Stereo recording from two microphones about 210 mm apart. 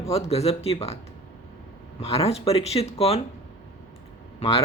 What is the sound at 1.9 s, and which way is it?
Speech, 30° left (ahead or behind).